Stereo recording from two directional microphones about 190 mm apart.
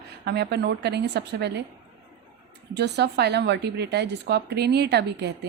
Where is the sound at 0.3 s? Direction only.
60° right (ahead or behind).